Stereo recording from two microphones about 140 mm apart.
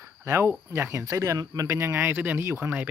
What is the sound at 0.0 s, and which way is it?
Cricket, 20° right (ahead or behind).